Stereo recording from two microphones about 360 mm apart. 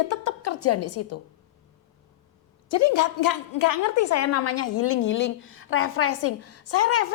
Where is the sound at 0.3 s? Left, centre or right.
Left.